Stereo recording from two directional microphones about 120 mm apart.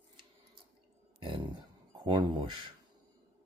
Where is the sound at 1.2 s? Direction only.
40° right (ahead or behind).